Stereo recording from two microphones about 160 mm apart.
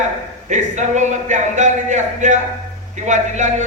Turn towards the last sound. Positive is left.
turn(degrees=-50)  # may be behind; listen again after turning